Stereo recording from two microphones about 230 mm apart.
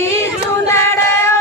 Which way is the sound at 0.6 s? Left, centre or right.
Centre.